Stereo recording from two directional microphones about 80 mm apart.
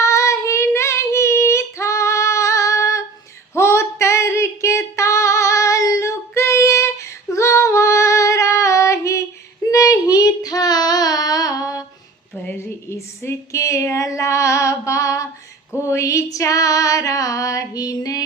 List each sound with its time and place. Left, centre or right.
0.0 s child singing: left
3.5 s female singing: left
9.7 s child singing: left
12.5 s a sound: left
15.7 s female singing: left